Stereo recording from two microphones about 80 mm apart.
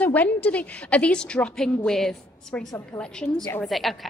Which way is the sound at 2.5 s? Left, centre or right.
Centre.